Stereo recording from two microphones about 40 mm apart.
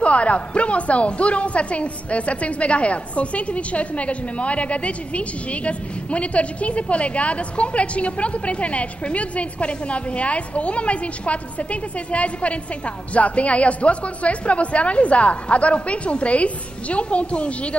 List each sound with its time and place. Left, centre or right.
0.0 s a woman's voice: left